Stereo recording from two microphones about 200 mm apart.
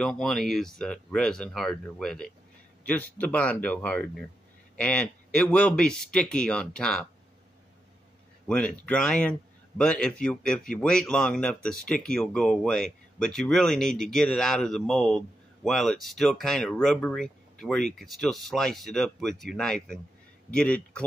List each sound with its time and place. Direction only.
0.0 s speech: centre (ahead or behind)
8.5 s speech: 5° left (ahead or behind)